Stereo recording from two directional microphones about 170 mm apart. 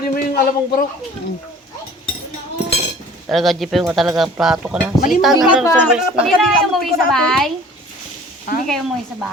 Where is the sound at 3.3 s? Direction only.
Centre (ahead or behind).